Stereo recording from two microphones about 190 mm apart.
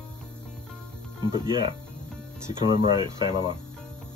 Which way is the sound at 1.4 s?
25° right (ahead or behind).